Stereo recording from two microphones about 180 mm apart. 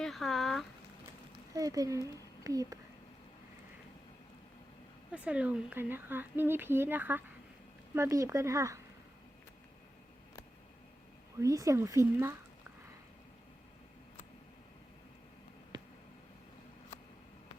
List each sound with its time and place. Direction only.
0.0 s speech: centre (ahead or behind)
1.5 s speech: 20° right (ahead or behind)
5.1 s speech: 5° right (ahead or behind)
11.3 s speech: 20° right (ahead or behind)